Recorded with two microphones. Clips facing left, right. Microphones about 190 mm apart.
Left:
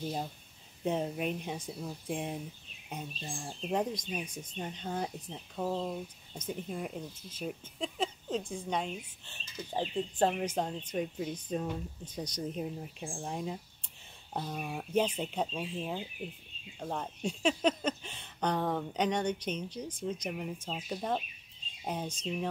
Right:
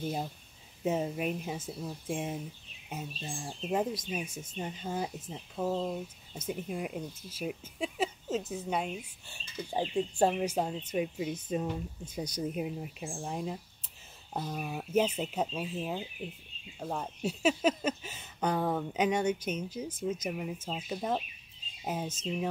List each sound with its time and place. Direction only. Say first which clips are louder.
0.0 s speech: right 2 dB; 5° right (ahead or behind)